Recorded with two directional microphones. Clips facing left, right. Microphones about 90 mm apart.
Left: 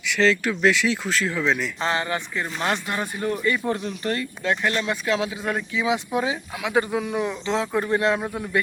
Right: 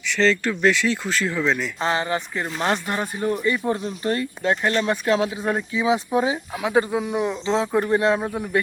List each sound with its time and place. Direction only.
0.1 s speech: 5° left (ahead or behind)
1.8 s speech: 25° right (ahead or behind)
7.7 s speech: 10° right (ahead or behind)
7.9 s speech: 25° right (ahead or behind)